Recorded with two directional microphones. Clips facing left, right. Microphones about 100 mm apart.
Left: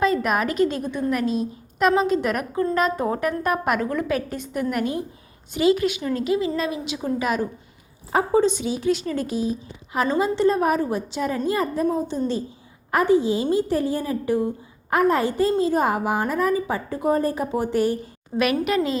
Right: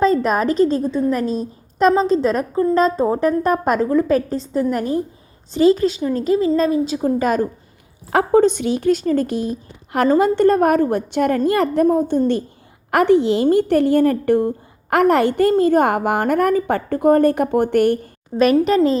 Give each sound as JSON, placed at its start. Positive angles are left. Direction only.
{"t": 0.0, "sound": "a woman's voice", "side_deg": -35}
{"t": 8.1, "sound": "a woman's voice", "side_deg": -55}
{"t": 12.9, "sound": "a woman's voice", "side_deg": -70}
{"t": 18.7, "sound": "a woman's voice", "side_deg": -35}